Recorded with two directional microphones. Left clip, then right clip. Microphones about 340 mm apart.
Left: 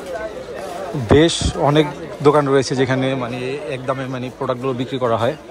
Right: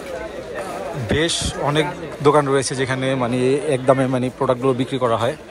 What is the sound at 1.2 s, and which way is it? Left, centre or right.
A man's voice, centre.